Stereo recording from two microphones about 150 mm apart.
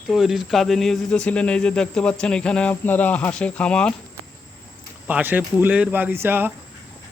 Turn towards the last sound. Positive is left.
turn(degrees=-15)  # may be behind; listen again after turning